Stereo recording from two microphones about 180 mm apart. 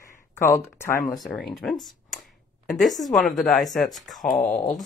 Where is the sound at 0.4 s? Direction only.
15° left (ahead or behind).